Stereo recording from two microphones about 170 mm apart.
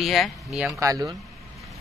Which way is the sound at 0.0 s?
Centre (ahead or behind).